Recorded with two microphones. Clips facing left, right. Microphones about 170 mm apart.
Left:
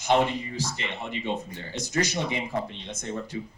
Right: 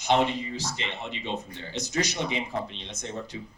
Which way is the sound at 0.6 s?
55° left (ahead or behind).